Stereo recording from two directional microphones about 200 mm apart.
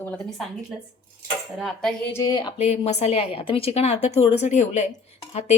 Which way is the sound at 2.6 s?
30° left (ahead or behind).